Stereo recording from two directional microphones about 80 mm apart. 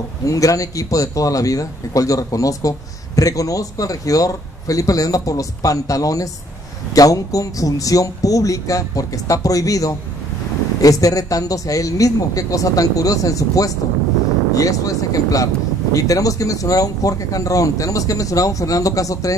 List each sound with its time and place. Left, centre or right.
0.3 s speech: left